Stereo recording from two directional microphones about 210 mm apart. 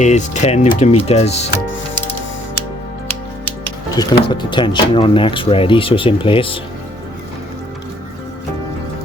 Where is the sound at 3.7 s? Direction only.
20° left (ahead or behind).